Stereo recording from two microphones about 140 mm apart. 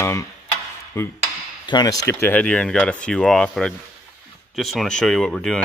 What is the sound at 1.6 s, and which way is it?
Speech, 30° left (ahead or behind).